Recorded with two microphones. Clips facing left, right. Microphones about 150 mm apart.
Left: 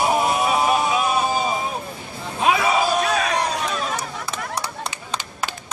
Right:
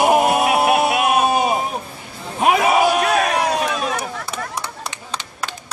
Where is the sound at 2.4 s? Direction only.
60° right (ahead or behind).